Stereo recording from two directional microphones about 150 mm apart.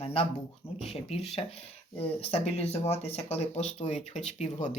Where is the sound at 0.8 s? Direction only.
45° left (ahead or behind).